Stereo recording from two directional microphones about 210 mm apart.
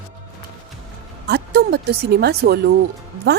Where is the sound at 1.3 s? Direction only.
50° right (ahead or behind).